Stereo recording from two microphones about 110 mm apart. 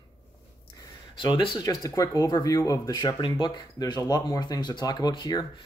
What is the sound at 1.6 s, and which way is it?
Speech, 30° left (ahead or behind).